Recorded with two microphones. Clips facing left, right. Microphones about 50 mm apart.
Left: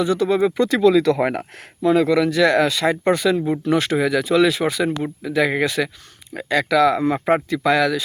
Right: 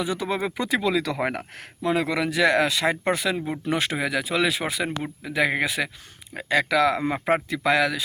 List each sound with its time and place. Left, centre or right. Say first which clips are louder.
0.0 s speech: left 8 dB; centre
1.2 s speech: left 6 dB; centre
1.8 s speech: left 8 dB; centre